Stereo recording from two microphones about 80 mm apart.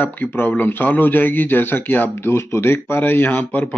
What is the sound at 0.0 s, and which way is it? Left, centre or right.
A man's voice, left.